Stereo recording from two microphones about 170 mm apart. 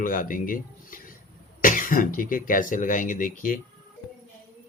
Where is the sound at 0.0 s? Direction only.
55° left (ahead or behind).